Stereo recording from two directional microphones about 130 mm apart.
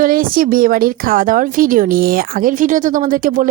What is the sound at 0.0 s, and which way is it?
A woman's voice, 90° right.